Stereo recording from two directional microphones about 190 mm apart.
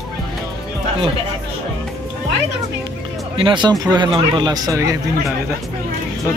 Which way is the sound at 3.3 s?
25° right (ahead or behind).